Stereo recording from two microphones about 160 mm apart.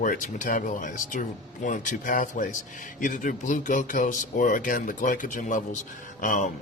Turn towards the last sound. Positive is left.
turn(degrees=50)  # may be behind; listen again after turning